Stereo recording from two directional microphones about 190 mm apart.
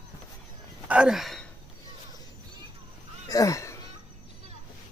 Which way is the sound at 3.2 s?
20° left (ahead or behind).